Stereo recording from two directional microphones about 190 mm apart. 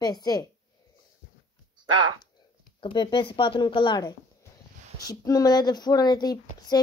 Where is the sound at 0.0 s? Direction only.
20° left (ahead or behind).